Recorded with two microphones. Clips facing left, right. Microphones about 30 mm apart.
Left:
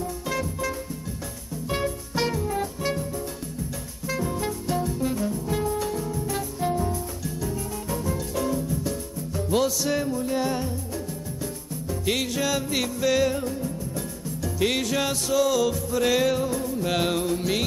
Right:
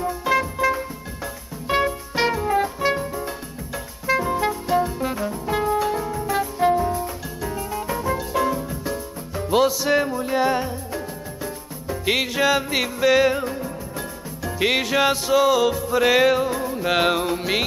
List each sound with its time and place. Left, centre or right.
0.0 s music: right
11.9 s music: right